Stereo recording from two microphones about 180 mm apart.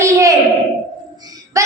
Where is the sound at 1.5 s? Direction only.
20° right (ahead or behind).